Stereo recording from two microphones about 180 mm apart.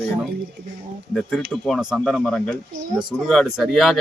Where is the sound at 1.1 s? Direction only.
5° left (ahead or behind).